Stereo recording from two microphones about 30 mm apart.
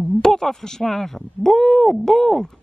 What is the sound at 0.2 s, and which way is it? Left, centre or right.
A woman's voice, centre.